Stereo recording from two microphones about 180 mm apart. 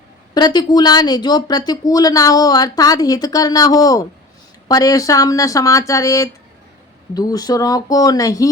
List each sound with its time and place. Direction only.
0.3 s speech: 25° left (ahead or behind)